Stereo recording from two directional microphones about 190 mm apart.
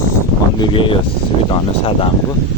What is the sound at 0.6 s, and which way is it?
Speech, 25° left (ahead or behind).